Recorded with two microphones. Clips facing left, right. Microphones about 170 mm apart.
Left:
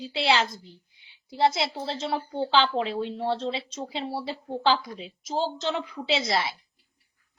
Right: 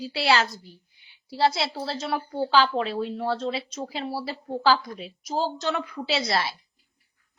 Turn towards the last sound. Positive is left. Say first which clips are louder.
# even
turn(degrees=25)  # may be behind; listen again after turning